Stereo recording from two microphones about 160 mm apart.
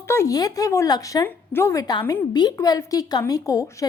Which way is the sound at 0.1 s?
20° left (ahead or behind).